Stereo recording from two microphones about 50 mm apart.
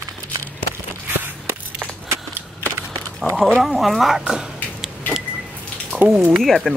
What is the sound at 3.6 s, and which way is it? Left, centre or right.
Speech, centre.